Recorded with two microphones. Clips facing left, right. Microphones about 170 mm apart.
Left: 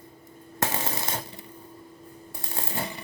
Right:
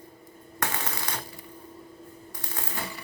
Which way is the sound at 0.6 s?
25° left (ahead or behind).